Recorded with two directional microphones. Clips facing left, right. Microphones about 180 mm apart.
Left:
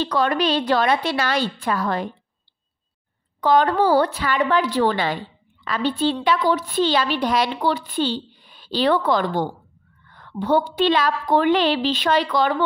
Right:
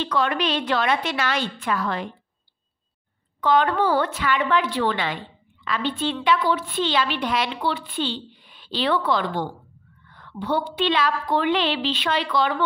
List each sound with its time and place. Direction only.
0.0 s a woman's voice: 40° left (ahead or behind)
3.3 s a woman's voice: 35° left (ahead or behind)